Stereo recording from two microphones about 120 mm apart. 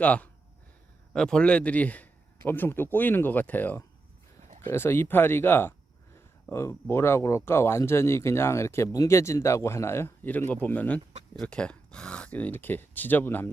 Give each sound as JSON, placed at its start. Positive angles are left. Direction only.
{"t": 0.0, "sound": "a man's voice", "side_deg": 10}